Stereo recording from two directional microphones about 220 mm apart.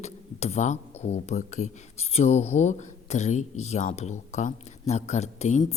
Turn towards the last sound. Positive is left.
turn(degrees=30)  # may be behind; listen again after turning